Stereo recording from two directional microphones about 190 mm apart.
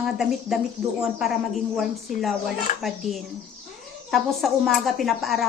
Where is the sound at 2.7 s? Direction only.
40° left (ahead or behind).